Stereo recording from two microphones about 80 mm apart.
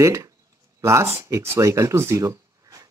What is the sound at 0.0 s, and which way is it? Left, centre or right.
Speech, right.